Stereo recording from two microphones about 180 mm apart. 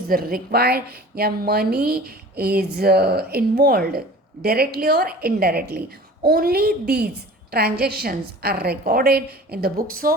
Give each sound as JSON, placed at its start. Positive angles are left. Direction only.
{"t": 0.1, "sound": "a woman's voice", "side_deg": -55}